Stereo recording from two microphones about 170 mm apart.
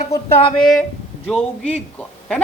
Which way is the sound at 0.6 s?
Centre (ahead or behind).